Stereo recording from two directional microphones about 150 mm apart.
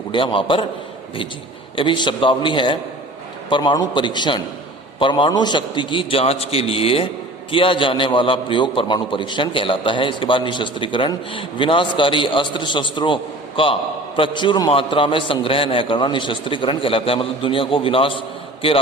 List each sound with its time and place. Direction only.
0.1 s a man's voice: 35° left (ahead or behind)
1.7 s a man's voice: 35° left (ahead or behind)
14.2 s a man's voice: 30° left (ahead or behind)